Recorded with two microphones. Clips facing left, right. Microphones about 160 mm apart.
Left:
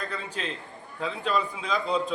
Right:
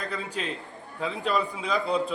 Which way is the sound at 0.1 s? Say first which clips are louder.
Right 2 dB; 10° right (ahead or behind).